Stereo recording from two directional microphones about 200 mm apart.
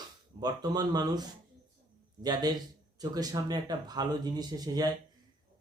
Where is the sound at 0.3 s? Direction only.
20° right (ahead or behind).